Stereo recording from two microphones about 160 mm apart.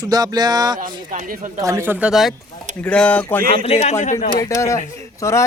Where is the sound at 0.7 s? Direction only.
55° right (ahead or behind).